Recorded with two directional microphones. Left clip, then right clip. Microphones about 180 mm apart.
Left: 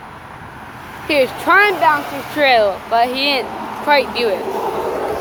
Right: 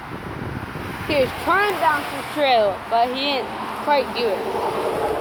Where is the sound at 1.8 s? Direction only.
40° left (ahead or behind).